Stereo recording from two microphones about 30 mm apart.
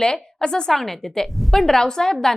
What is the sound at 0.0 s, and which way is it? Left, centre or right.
Speech, left.